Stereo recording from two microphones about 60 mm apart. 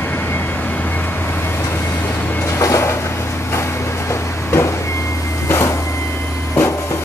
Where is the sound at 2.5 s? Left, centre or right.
Left.